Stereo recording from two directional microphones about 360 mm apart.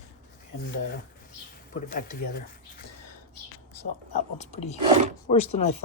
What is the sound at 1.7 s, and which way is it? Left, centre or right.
Speech, left.